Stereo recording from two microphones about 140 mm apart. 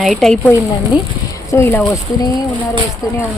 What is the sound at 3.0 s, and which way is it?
Speech, 25° left (ahead or behind).